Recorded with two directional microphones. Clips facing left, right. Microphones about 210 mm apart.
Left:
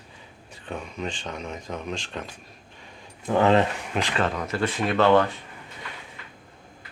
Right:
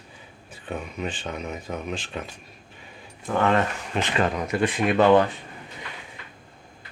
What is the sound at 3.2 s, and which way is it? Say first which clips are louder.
Speech: left 3 dB; 20° left (ahead or behind).